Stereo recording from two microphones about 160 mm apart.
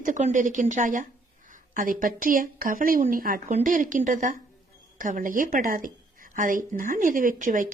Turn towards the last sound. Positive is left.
turn(degrees=-55)  # may be behind; listen again after turning